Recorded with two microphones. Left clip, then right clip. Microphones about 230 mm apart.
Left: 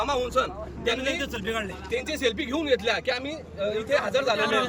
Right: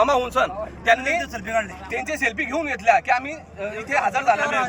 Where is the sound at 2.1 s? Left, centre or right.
Centre.